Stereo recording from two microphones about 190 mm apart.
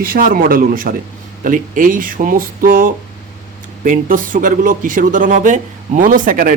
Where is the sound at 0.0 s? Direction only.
50° right (ahead or behind).